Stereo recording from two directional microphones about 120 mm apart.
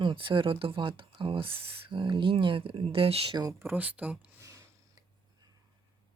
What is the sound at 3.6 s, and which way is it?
Speech, 15° right (ahead or behind).